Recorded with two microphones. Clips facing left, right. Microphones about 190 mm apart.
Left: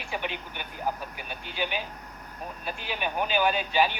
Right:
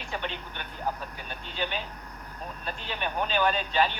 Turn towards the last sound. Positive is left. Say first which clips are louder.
# left 1 dB
turn(degrees=10)  # may be behind; listen again after turning